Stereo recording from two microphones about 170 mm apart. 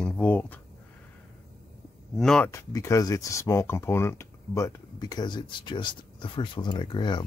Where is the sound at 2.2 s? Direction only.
5° left (ahead or behind).